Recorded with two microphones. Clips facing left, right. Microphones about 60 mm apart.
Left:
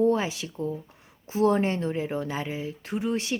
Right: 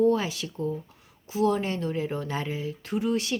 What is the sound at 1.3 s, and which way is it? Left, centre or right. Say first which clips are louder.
Speech: left 2 dB; left.